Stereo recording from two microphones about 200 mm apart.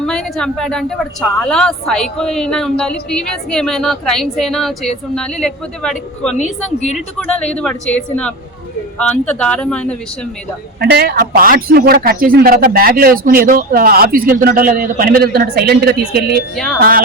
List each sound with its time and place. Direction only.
0.0 s a woman's voice: 5° left (ahead or behind)
10.8 s a man's voice: 55° right (ahead or behind)